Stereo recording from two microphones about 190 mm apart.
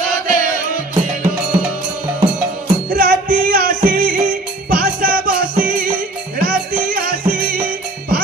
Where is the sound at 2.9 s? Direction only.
50° right (ahead or behind).